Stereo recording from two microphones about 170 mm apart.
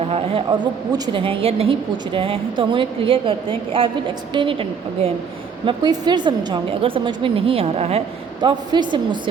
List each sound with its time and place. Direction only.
0.1 s a woman's voice: 35° right (ahead or behind)
0.9 s a woman's voice: 25° right (ahead or behind)
5.6 s a woman's voice: 25° right (ahead or behind)